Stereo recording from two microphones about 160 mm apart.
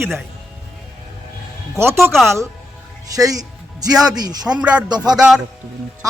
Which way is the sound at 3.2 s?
20° right (ahead or behind).